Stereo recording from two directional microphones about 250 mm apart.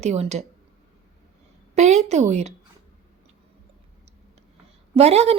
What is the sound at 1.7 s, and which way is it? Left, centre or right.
Speech, right.